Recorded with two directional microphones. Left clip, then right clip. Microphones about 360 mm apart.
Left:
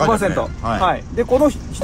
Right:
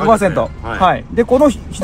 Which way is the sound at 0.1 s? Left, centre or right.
Centre.